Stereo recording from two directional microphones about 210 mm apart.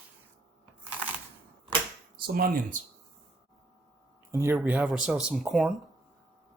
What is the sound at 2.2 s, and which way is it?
Speech, 45° right (ahead or behind).